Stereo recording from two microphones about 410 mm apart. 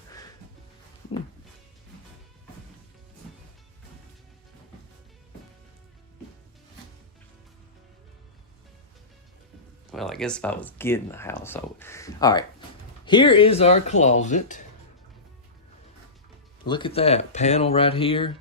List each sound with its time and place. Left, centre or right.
0.1 s music: centre
9.9 s speech: centre
16.6 s speech: centre